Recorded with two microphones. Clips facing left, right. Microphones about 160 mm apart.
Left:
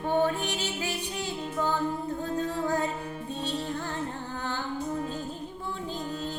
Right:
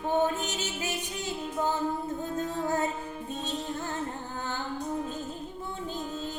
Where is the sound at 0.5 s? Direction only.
20° right (ahead or behind).